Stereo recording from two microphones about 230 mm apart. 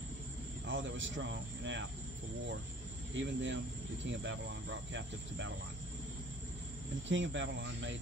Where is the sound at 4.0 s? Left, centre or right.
Right.